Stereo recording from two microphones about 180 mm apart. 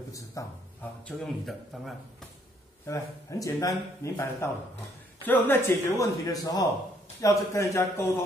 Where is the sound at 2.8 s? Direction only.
15° left (ahead or behind).